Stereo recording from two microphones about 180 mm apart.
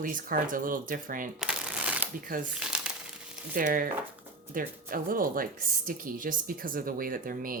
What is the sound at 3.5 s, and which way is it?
Speech, 50° right (ahead or behind).